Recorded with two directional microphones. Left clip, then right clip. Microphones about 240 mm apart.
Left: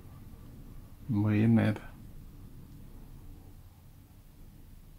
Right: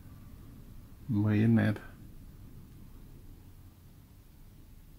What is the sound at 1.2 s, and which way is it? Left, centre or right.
Speech, centre.